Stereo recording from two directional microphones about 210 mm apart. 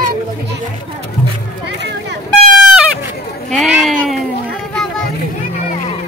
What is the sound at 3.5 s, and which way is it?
Speech, centre (ahead or behind).